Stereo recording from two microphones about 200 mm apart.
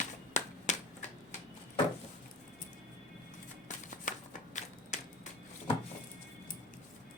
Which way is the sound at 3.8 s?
40° left (ahead or behind).